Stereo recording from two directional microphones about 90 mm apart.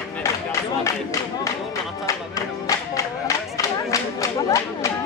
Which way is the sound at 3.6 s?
35° left (ahead or behind).